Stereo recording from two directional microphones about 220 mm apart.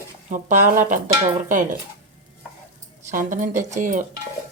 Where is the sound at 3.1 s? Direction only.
35° right (ahead or behind).